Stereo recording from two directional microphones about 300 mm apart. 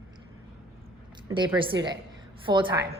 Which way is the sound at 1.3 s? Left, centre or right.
Centre.